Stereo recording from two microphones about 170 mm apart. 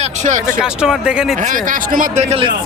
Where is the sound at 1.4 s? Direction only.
55° right (ahead or behind).